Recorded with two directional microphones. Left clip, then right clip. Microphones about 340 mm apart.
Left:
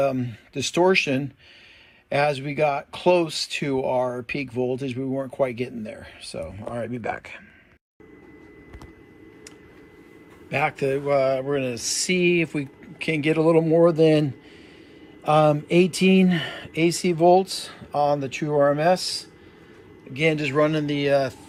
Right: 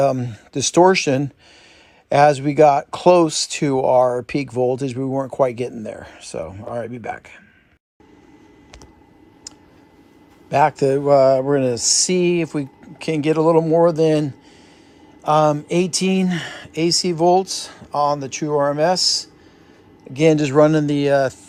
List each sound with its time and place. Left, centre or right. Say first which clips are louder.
0.0 s speech: right 5 dB; centre
5.0 s speech: right 6 dB; right
5.5 s speech: right 6 dB; centre
10.7 s speech: right 7 dB; right
11.0 s speech: right 9 dB; centre